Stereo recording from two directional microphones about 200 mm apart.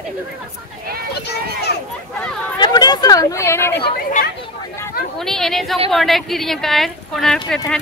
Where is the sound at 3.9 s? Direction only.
45° left (ahead or behind).